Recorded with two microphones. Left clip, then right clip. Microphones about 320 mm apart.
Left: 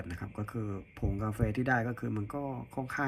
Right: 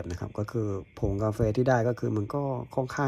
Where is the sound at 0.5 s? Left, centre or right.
Left.